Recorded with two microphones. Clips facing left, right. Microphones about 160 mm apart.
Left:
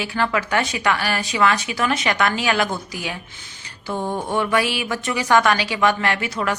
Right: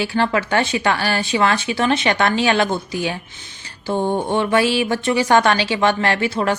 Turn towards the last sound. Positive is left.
turn(degrees=-30)  # may be behind; listen again after turning